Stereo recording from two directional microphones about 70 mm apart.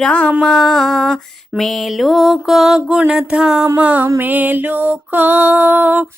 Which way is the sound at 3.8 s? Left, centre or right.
Right.